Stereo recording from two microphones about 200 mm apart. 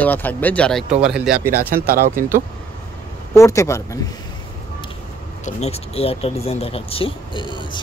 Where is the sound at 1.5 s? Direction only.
50° right (ahead or behind).